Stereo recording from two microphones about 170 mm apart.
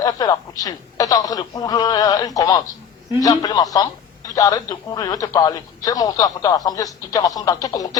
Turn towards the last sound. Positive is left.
turn(degrees=20)  # may be behind; listen again after turning